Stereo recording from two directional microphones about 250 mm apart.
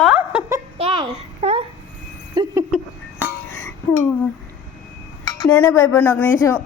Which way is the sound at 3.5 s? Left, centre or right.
Centre.